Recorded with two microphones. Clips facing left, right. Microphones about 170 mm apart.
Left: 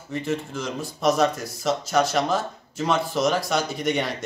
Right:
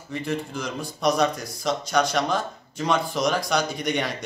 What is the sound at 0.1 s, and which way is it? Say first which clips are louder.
Speech: left 1 dB; centre (ahead or behind).